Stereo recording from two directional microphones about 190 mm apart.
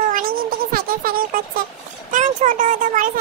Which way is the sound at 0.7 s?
50° right (ahead or behind).